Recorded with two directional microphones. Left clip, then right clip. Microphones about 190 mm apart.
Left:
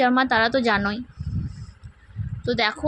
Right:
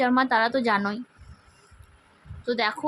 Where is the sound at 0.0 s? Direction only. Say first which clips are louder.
Left 2 dB; 15° left (ahead or behind).